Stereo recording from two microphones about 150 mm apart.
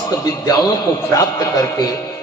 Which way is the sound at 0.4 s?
25° left (ahead or behind).